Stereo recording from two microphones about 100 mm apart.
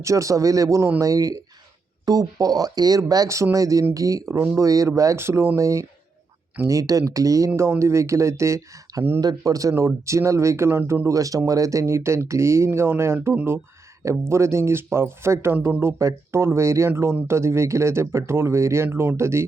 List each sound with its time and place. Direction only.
0.0 s speech: 30° right (ahead or behind)